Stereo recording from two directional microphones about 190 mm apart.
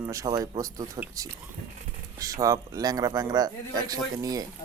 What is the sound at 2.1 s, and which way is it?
A man's voice, 15° right (ahead or behind).